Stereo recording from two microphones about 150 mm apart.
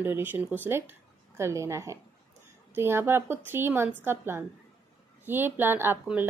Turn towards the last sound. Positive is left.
turn(degrees=-15)  # may be behind; listen again after turning